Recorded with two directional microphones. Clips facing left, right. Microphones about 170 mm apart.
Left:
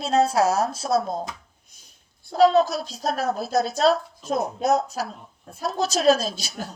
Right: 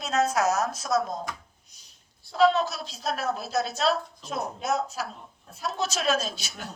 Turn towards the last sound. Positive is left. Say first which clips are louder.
# left 4 dB
turn(degrees=35)  # may be behind; listen again after turning